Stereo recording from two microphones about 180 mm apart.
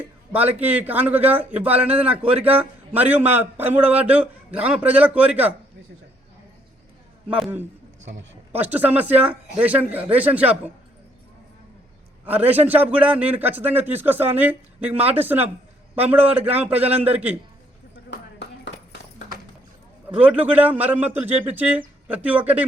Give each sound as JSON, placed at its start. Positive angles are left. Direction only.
{"t": 0.0, "sound": "a man's voice", "side_deg": -10}
{"t": 7.3, "sound": "a man's voice", "side_deg": -5}
{"t": 8.0, "sound": "speech", "side_deg": -90}
{"t": 8.5, "sound": "a man's voice", "side_deg": -10}
{"t": 12.2, "sound": "a man's voice", "side_deg": -10}
{"t": 18.1, "sound": "a sound", "side_deg": 75}
{"t": 20.1, "sound": "a man's voice", "side_deg": -10}